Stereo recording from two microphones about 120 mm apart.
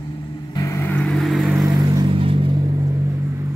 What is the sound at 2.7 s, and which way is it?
Vehicle, 25° right (ahead or behind).